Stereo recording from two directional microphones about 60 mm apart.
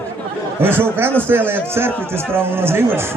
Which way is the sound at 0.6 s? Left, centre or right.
Right.